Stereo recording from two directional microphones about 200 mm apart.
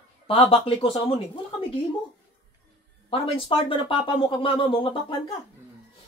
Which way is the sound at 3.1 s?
25° left (ahead or behind).